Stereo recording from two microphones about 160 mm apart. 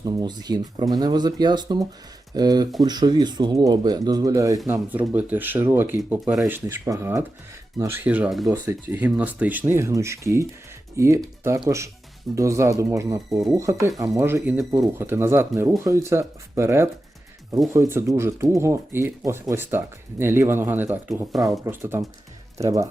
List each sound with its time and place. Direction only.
0.0 s speech: 25° right (ahead or behind)
4.7 s speech: 10° right (ahead or behind)
6.7 s speech: 15° right (ahead or behind)
21.1 s speech: centre (ahead or behind)
21.6 s speech: 15° right (ahead or behind)